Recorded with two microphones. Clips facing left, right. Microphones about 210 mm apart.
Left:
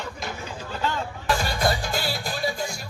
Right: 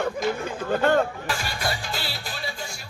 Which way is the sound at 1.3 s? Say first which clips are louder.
Left 5 dB; 40° left (ahead or behind).